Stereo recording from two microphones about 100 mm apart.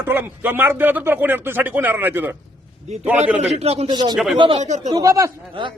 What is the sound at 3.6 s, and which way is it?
Speech, 90° right.